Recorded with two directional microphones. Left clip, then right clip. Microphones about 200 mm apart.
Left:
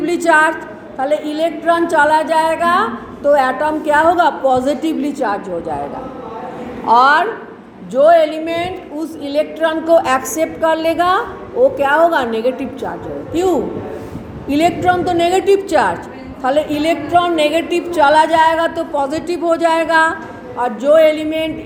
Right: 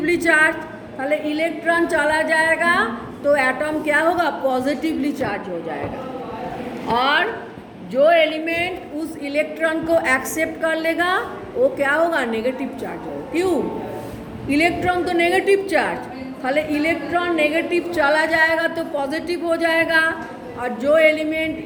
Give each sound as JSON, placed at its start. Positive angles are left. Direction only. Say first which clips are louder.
{"t": 0.0, "sound": "a woman's voice", "louder": "left 4 dB", "side_deg": 15}
{"t": 6.8, "sound": "a woman's voice", "louder": "left 8 dB", "side_deg": 25}